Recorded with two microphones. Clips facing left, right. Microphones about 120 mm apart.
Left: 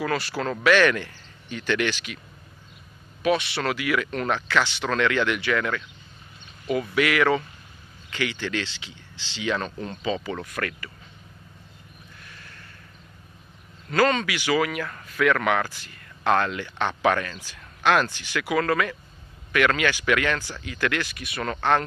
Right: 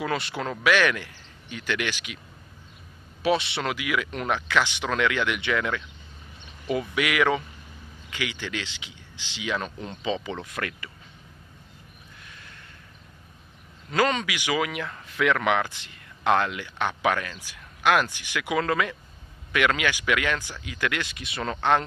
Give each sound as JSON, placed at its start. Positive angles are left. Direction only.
{"t": 0.0, "sound": "speech", "side_deg": -20}
{"t": 3.2, "sound": "speech", "side_deg": -25}
{"t": 3.6, "sound": "speech", "side_deg": -10}
{"t": 13.8, "sound": "speech", "side_deg": -15}